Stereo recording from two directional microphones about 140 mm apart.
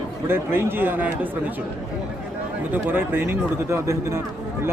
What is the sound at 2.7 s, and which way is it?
Speech, 15° right (ahead or behind).